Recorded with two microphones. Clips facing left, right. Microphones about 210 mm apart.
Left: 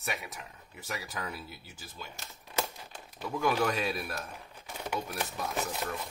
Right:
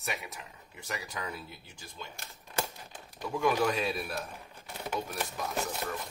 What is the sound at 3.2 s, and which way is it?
Speech, centre (ahead or behind).